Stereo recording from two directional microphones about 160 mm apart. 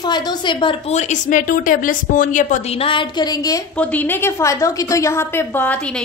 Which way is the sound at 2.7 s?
35° left (ahead or behind).